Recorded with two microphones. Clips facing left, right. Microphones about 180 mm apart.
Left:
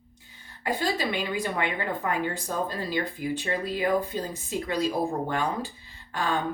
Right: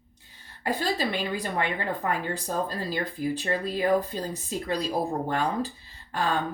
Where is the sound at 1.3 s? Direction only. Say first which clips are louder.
Even; 35° right (ahead or behind).